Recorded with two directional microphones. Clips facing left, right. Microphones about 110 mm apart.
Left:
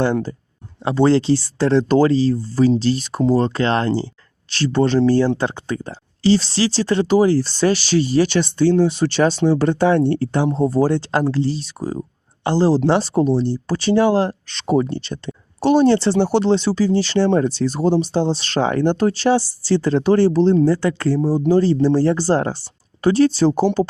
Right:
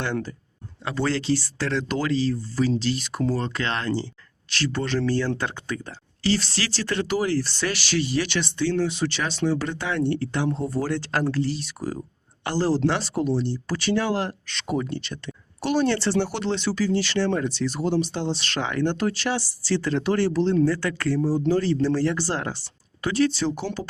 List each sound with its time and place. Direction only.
0.0 s speech: 35° left (ahead or behind)